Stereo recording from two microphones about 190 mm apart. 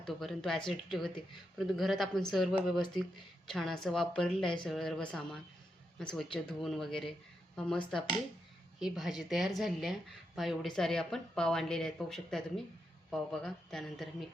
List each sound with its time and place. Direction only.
0.1 s speech: centre (ahead or behind)